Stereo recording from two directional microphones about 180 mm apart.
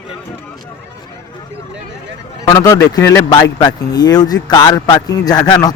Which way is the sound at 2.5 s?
20° left (ahead or behind).